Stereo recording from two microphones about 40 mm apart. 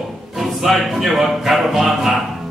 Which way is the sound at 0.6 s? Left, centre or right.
Centre.